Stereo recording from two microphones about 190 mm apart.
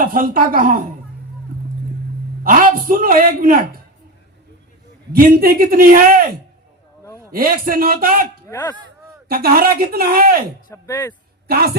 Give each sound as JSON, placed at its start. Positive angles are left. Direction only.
{"t": 0.0, "sound": "a man's voice", "side_deg": -45}
{"t": 2.4, "sound": "a man's voice", "side_deg": -45}
{"t": 5.1, "sound": "a man's voice", "side_deg": -50}
{"t": 8.4, "sound": "speech", "side_deg": 15}
{"t": 9.3, "sound": "a man's voice", "side_deg": -50}
{"t": 10.7, "sound": "speech", "side_deg": 15}
{"t": 11.4, "sound": "a woman's voice", "side_deg": -55}